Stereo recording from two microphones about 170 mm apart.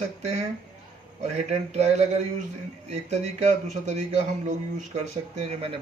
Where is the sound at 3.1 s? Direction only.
45° right (ahead or behind).